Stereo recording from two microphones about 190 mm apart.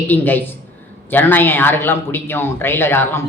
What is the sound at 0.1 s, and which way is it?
A man's voice, 10° left (ahead or behind).